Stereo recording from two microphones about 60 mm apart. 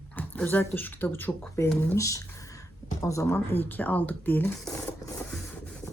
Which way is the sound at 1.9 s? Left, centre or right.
Left.